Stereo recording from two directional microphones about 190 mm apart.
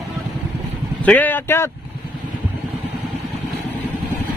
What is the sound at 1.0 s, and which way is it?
Speech, 10° left (ahead or behind).